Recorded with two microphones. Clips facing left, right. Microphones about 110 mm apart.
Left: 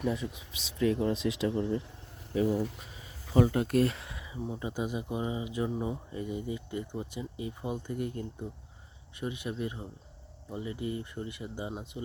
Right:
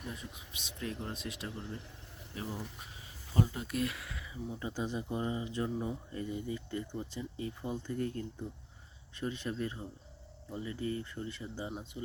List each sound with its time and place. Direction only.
0.0 s speech: 90° left
3.4 s speech: 70° left (ahead or behind)
3.7 s speech: 40° left (ahead or behind)
4.0 s a sound: 20° left (ahead or behind)
4.4 s speech: 25° left (ahead or behind)
4.7 s speech: 15° left (ahead or behind)